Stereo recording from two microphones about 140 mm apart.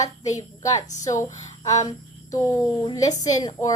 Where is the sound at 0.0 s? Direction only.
25° left (ahead or behind).